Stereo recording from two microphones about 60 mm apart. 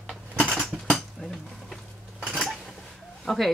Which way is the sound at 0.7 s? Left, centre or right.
Centre.